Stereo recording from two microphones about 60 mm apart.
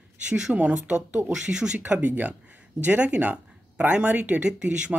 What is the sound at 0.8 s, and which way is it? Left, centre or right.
Speech, right.